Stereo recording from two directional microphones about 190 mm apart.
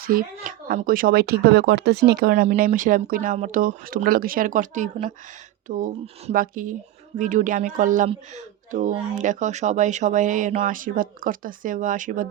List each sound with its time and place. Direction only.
0.0 s a woman's voice: 50° right (ahead or behind)